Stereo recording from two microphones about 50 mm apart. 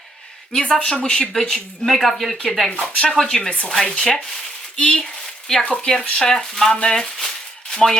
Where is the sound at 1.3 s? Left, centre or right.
Centre.